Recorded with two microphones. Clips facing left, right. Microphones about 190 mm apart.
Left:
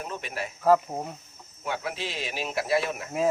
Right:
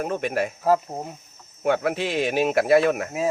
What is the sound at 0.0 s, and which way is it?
Speech, 55° right (ahead or behind).